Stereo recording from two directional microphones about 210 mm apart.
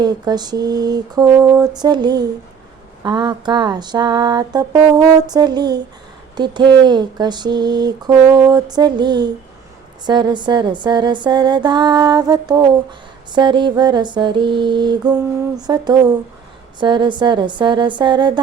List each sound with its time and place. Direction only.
0.0 s mantra: 20° right (ahead or behind)